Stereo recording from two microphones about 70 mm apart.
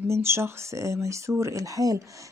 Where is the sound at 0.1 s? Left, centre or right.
Right.